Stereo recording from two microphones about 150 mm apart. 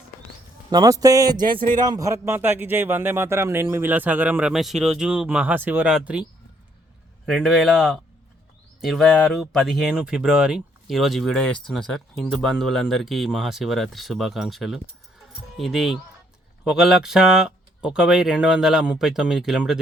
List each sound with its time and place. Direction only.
0.7 s music: 25° right (ahead or behind)
1.8 s a man's voice: 25° right (ahead or behind); by 6.2 s 5° right (ahead or behind)
7.3 s speech: centre (ahead or behind)